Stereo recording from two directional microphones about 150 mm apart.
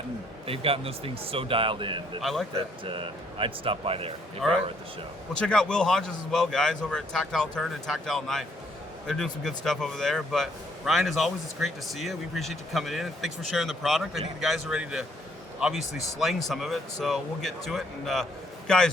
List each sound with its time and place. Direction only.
0.4 s speech: 40° right (ahead or behind)
2.2 s a man's voice: centre (ahead or behind)
2.6 s speech: 35° right (ahead or behind)
5.4 s a man's voice: 5° left (ahead or behind)